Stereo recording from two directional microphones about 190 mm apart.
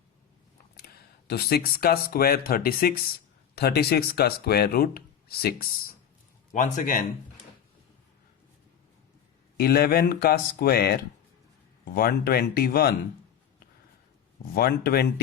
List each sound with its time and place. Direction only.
1.3 s speech: 55° left (ahead or behind)
6.5 s speech: 40° left (ahead or behind)
9.6 s speech: 55° left (ahead or behind)
14.5 s speech: 55° left (ahead or behind)